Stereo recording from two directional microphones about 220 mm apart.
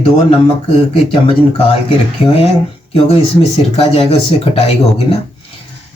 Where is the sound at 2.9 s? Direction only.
25° left (ahead or behind).